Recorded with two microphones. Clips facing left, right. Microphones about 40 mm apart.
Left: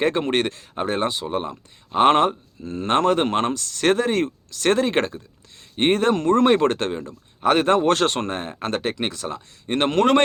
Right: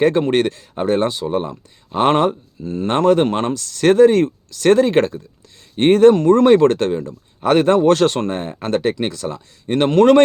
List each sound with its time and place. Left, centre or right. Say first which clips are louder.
0.0 s speech: right 6 dB; left
7.9 s speech: right 5 dB; left
8.3 s speech: right 4 dB; centre
8.6 s speech: right 6 dB; left
9.6 s speech: right 6 dB; left